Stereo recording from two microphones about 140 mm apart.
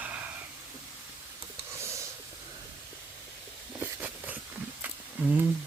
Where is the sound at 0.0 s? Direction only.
10° right (ahead or behind).